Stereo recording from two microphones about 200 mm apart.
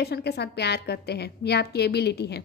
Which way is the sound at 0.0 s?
55° left (ahead or behind).